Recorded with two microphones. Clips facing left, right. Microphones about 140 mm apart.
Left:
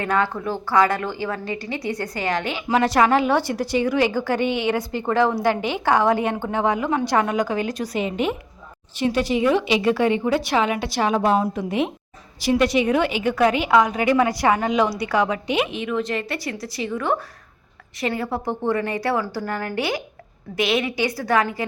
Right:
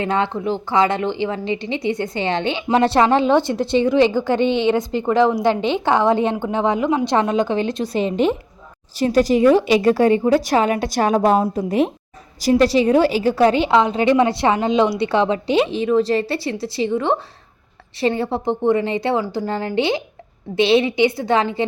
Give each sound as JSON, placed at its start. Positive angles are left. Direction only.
{"t": 0.0, "sound": "a woman's voice", "side_deg": -25}
{"t": 11.4, "sound": "a woman's voice", "side_deg": -25}
{"t": 12.4, "sound": "a woman's voice", "side_deg": -35}